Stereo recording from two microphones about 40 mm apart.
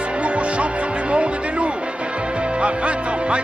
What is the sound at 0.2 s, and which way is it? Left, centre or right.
Music, right.